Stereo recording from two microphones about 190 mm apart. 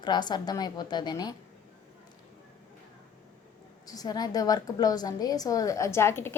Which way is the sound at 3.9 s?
20° left (ahead or behind).